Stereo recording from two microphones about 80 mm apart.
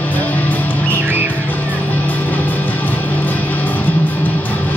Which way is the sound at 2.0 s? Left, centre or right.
Left.